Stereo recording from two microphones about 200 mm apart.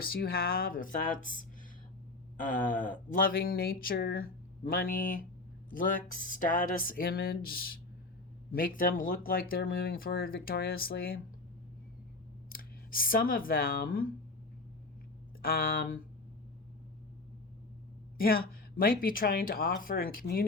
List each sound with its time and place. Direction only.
0.0 s speech: 50° left (ahead or behind)
2.6 s speech: 45° left (ahead or behind)
12.5 s speech: 45° left (ahead or behind)
15.4 s speech: 45° left (ahead or behind)
18.2 s speech: 45° left (ahead or behind)